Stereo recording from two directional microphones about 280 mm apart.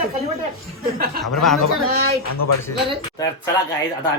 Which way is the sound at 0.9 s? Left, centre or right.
Right.